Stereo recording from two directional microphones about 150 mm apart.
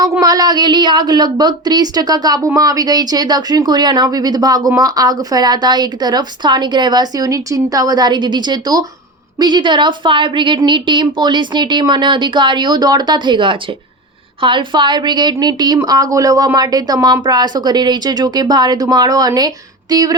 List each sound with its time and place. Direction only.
0.0 s a woman's voice: 25° right (ahead or behind)